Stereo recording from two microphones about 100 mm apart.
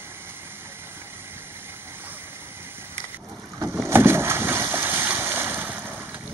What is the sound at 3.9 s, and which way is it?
Boat, 25° right (ahead or behind).